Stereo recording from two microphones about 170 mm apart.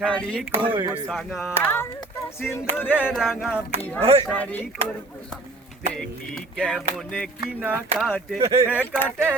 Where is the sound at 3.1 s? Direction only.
Centre (ahead or behind).